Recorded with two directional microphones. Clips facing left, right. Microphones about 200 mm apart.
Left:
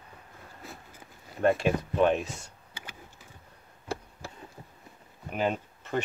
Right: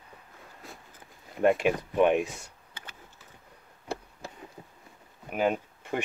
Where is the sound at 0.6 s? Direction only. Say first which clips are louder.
Left 2 dB; centre (ahead or behind).